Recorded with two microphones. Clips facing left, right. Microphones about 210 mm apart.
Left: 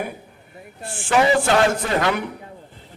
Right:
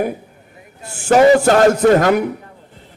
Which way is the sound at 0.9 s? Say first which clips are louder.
Right 8 dB; 40° right (ahead or behind).